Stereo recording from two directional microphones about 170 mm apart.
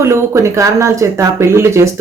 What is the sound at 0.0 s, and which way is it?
Speech, 15° right (ahead or behind).